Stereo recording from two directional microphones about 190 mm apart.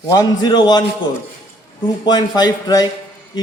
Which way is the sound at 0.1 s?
20° left (ahead or behind).